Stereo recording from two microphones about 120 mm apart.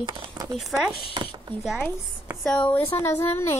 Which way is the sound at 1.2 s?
40° right (ahead or behind).